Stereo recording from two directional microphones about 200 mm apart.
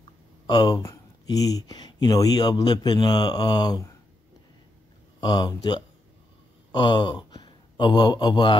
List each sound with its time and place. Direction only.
0.0 s speech: 20° left (ahead or behind)
5.2 s speech: 20° left (ahead or behind)